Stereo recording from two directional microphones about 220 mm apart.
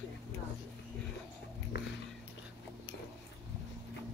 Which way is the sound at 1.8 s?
45° left (ahead or behind).